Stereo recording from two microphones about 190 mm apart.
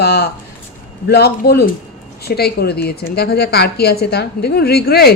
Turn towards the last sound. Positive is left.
turn(degrees=55)  # may be behind; listen again after turning